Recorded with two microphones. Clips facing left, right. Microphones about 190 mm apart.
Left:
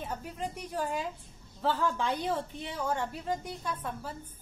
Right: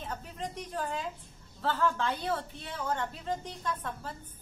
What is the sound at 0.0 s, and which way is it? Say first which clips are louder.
A woman's voice: left 2 dB; 10° left (ahead or behind).